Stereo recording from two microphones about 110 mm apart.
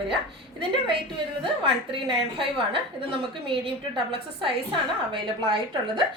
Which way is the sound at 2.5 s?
55° right (ahead or behind).